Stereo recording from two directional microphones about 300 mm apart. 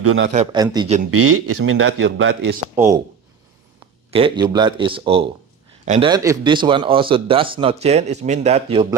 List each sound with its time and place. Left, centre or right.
0.0 s a man's voice: right
0.3 s a man's voice: centre
1.1 s a man's voice: right
2.7 s a man's voice: centre
4.1 s a man's voice: centre